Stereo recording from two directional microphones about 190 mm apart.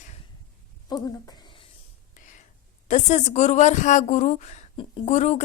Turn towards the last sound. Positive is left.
turn(degrees=35)  # may be behind; listen again after turning